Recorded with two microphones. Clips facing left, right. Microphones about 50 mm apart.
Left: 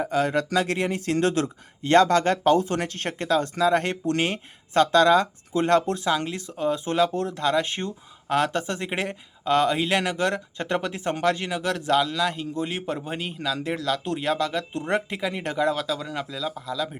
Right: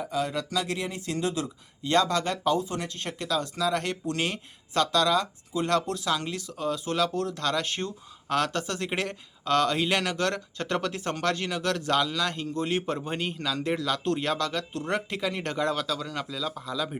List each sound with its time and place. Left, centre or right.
0.0 s speech: left
1.9 s speech: left; by 17.0 s centre